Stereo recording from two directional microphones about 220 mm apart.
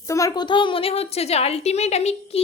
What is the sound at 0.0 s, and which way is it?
A woman's voice, 15° left (ahead or behind).